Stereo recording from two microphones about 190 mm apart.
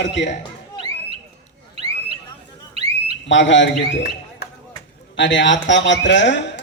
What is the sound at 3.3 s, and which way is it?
Speech, 75° left (ahead or behind).